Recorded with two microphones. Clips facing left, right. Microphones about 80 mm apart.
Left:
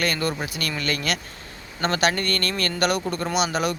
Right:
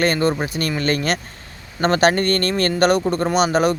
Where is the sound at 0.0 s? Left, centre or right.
Right.